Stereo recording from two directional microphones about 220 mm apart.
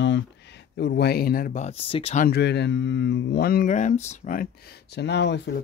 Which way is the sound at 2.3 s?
50° left (ahead or behind).